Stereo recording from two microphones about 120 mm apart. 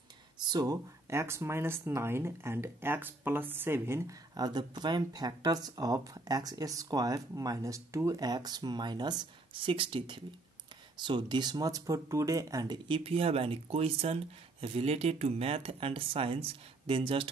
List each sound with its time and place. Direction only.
0.5 s speech: 35° right (ahead or behind)
1.1 s speech: 20° right (ahead or behind)
4.4 s speech: 35° right (ahead or behind)
12.8 s speech: 50° right (ahead or behind)